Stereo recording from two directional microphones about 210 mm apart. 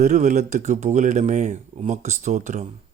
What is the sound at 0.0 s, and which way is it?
Speech, 35° right (ahead or behind).